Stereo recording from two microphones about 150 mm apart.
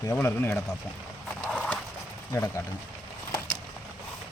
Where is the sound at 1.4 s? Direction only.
10° left (ahead or behind).